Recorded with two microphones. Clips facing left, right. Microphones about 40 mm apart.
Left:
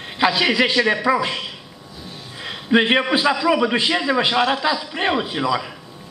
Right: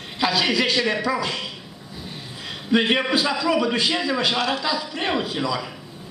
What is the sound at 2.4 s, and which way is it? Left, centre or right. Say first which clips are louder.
A man's voice: left 3 dB; left.